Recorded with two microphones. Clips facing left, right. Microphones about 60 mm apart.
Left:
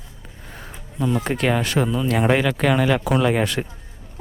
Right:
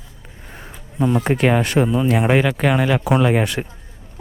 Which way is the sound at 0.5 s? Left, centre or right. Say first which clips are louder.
Right 2 dB; centre.